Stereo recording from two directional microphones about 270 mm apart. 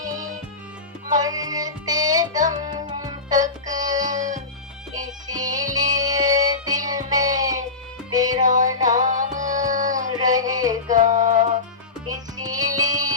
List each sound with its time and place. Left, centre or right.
1.2 s music: centre
4.1 s music: right
5.3 s music: centre
8.4 s music: right
10.1 s music: centre
10.8 s music: right
12.0 s music: centre